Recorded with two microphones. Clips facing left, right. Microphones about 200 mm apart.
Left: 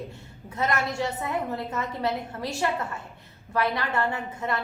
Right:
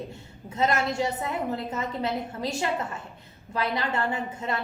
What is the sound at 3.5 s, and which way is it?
A woman's voice, 20° right (ahead or behind).